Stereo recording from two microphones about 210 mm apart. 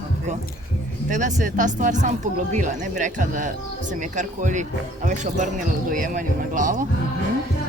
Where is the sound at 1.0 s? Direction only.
35° right (ahead or behind).